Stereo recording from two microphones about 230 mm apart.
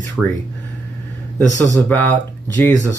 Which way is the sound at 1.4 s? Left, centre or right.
Centre.